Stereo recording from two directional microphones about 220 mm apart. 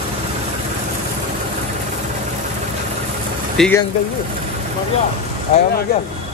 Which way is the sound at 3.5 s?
5° left (ahead or behind).